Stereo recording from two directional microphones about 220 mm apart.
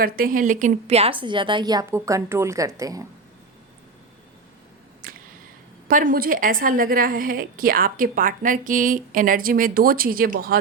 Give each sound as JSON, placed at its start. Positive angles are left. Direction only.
{"t": 0.0, "sound": "a woman's voice", "side_deg": -40}
{"t": 5.0, "sound": "a sound", "side_deg": -40}
{"t": 5.9, "sound": "a woman's voice", "side_deg": -40}